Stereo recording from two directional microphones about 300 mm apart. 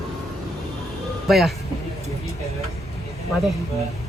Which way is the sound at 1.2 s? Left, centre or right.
Centre.